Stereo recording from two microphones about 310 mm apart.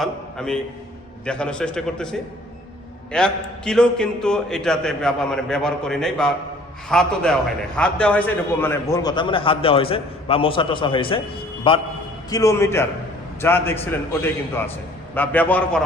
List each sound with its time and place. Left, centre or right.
0.0 s a man's voice: centre